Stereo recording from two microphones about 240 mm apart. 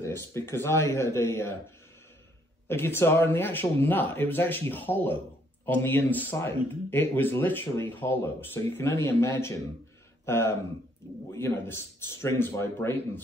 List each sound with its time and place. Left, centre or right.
0.0 s speech: centre
2.7 s speech: centre